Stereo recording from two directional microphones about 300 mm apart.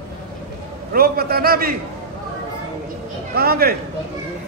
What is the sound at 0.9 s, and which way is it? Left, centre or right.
Speech, right.